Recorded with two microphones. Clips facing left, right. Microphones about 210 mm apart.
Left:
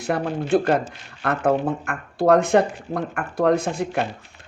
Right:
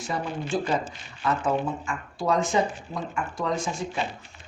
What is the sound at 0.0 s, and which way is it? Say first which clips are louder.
Speech: left 6 dB; 60° left (ahead or behind).